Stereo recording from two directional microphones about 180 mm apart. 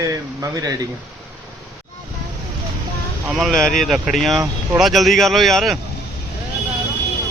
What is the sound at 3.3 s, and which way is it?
Speech, centre (ahead or behind).